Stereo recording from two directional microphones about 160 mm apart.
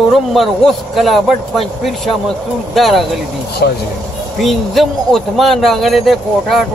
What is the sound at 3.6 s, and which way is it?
Speech, 75° left (ahead or behind).